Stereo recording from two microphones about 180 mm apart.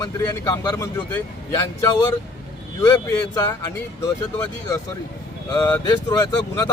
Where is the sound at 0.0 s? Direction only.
20° left (ahead or behind).